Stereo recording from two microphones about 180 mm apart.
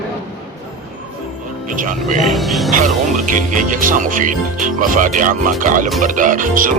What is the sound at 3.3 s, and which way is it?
Speech, 45° right (ahead or behind).